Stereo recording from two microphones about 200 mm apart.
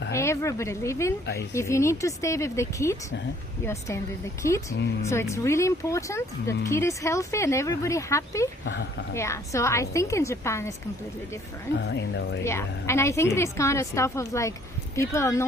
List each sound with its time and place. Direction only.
0.1 s speech: 15° left (ahead or behind)
4.7 s speech: 65° left (ahead or behind)
5.0 s speech: 15° left (ahead or behind)
8.6 s speech: 65° left (ahead or behind)
9.1 s speech: 15° left (ahead or behind)
11.9 s speech: 60° left (ahead or behind)
12.4 s speech: 15° left (ahead or behind)